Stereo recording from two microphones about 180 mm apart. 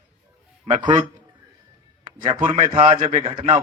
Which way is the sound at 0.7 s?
25° right (ahead or behind).